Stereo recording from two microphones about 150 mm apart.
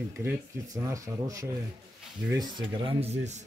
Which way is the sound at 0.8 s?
20° right (ahead or behind).